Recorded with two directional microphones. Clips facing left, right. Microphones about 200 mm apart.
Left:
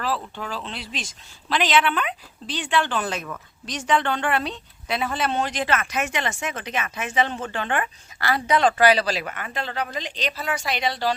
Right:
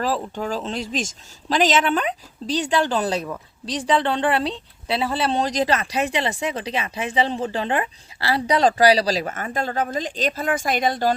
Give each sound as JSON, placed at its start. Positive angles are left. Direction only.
{"t": 0.3, "sound": "speech", "side_deg": -45}